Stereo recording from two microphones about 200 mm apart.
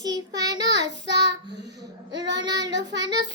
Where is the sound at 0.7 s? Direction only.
60° right (ahead or behind).